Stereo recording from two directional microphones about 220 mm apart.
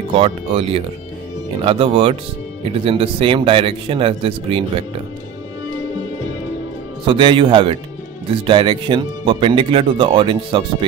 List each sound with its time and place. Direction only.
0.1 s speech: 25° right (ahead or behind)
7.1 s speech: 20° right (ahead or behind)